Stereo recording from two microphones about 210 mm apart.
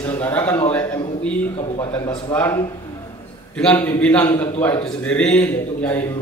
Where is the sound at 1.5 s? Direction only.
25° left (ahead or behind).